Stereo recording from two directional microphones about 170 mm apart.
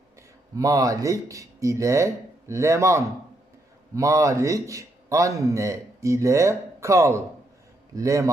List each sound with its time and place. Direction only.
0.5 s a man's voice: 20° right (ahead or behind)